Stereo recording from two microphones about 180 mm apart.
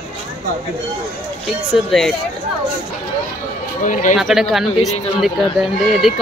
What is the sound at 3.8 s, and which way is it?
Speech, 45° left (ahead or behind).